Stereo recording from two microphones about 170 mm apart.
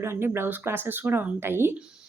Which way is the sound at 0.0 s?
15° right (ahead or behind).